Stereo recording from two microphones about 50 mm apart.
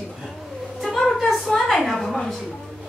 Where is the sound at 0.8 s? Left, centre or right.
Centre.